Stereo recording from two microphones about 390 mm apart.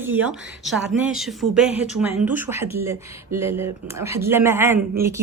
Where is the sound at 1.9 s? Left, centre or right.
Centre.